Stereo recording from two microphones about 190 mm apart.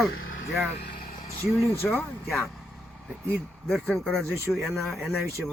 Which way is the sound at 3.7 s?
5° left (ahead or behind).